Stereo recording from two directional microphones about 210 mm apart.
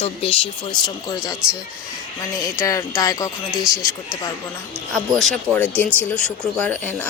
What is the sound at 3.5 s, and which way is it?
Speech, centre (ahead or behind).